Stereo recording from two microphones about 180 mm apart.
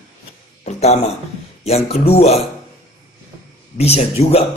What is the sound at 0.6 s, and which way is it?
A man's voice, 35° left (ahead or behind).